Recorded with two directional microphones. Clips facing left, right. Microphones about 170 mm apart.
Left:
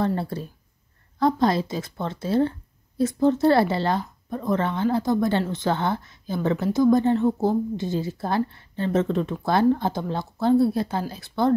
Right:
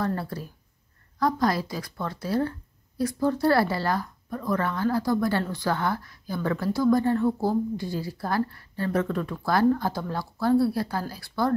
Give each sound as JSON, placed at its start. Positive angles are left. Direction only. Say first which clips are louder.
{"t": 0.0, "sound": "speech", "louder": "left 4 dB", "side_deg": 25}